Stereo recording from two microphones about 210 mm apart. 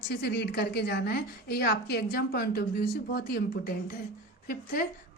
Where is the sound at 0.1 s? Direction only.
50° left (ahead or behind).